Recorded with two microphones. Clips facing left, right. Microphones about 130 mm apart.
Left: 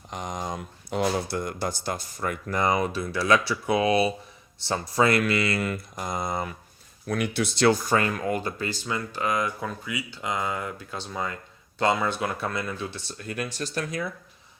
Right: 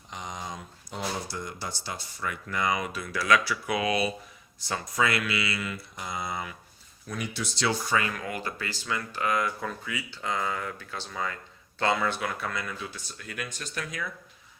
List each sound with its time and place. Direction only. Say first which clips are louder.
0.1 s speech: left 6 dB; 50° left (ahead or behind)
7.1 s speech: left 8 dB; 60° left (ahead or behind); by 14.1 s 35° left (ahead or behind)